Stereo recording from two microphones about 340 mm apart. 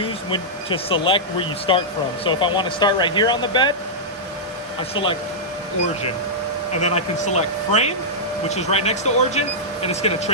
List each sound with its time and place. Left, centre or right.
0.0 s speech: centre
5.0 s speech: left
6.7 s speech: centre